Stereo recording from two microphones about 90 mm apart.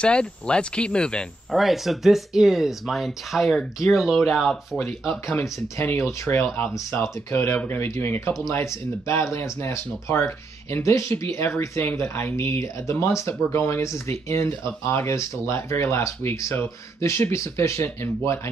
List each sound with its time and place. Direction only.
0.0 s speech: 10° left (ahead or behind)
1.5 s speech: centre (ahead or behind)
5.3 s speech: 30° left (ahead or behind)